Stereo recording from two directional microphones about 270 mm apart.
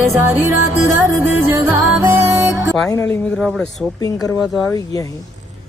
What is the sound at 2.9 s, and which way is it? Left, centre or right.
Speech, centre.